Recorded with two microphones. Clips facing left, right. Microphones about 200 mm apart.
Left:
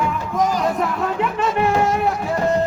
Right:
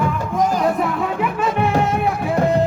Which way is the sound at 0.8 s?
5° right (ahead or behind).